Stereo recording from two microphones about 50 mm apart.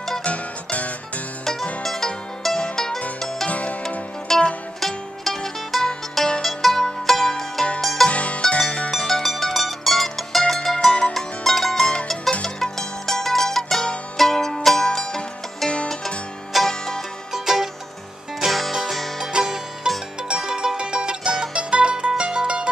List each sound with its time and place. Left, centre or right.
0.2 s music: left
1.4 s music: centre
3.4 s music: left
4.3 s music: centre
6.4 s music: centre
8.1 s music: left
8.9 s music: centre
10.9 s music: left
11.1 s music: centre
11.8 s music: left
17.3 s music: centre
19.3 s music: centre